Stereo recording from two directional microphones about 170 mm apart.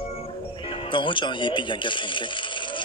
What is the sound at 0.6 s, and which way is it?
Speech, 30° left (ahead or behind).